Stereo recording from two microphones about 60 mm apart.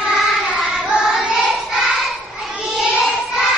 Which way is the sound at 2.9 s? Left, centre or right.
Centre.